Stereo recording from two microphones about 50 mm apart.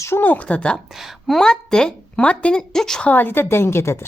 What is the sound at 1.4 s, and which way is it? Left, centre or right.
Speech, centre.